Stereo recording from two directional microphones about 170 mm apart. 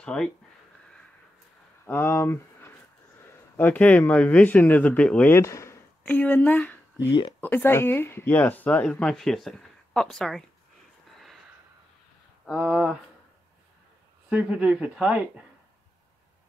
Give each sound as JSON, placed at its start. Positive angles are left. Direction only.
{"t": 0.0, "sound": "speech", "side_deg": 5}
{"t": 1.9, "sound": "speech", "side_deg": 10}
{"t": 7.1, "sound": "speech", "side_deg": 30}
{"t": 7.3, "sound": "speech", "side_deg": 10}
{"t": 11.1, "sound": "a sound", "side_deg": 0}
{"t": 12.4, "sound": "speech", "side_deg": 0}
{"t": 14.3, "sound": "a woman's voice", "side_deg": -5}